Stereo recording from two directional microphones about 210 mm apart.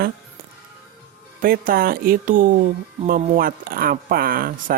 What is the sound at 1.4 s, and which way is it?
Speech, 45° right (ahead or behind).